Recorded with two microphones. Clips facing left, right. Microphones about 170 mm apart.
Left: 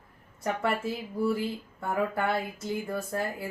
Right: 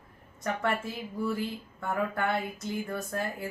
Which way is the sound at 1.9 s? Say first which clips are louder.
Left 1 dB; 10° left (ahead or behind).